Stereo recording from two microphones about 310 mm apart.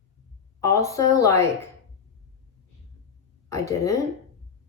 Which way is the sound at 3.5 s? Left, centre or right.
Centre.